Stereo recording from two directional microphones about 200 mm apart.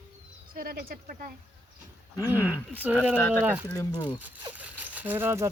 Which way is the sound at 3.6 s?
15° left (ahead or behind).